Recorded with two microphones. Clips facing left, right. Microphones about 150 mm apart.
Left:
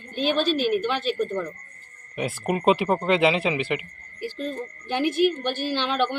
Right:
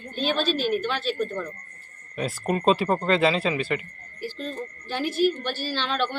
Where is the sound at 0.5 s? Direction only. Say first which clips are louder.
Left 2 dB; 55° left (ahead or behind).